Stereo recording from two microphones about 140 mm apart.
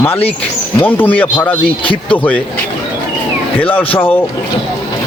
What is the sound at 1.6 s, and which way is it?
Speech, 40° left (ahead or behind).